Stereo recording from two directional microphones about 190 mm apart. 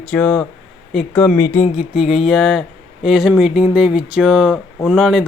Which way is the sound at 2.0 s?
Centre (ahead or behind).